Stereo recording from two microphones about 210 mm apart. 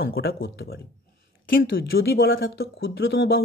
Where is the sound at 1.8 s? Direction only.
45° left (ahead or behind).